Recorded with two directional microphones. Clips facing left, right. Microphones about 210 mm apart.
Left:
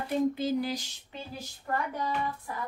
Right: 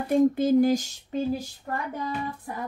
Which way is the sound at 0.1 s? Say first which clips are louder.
Right 8 dB; 50° right (ahead or behind).